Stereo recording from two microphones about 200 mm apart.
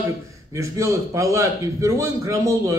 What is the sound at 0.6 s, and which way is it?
A man's voice, 15° right (ahead or behind).